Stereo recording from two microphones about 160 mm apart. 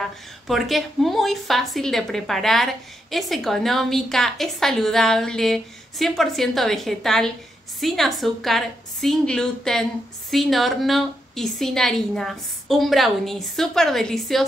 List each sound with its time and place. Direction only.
0.5 s a woman's voice: centre (ahead or behind)